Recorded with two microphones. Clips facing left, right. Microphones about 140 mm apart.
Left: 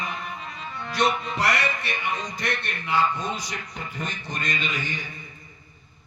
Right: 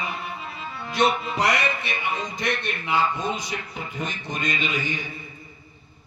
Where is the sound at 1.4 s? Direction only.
20° right (ahead or behind).